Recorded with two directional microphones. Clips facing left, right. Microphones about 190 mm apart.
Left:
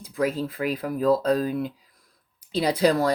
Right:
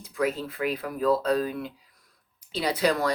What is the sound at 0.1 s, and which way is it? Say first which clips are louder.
Speech: left 2 dB; 40° left (ahead or behind).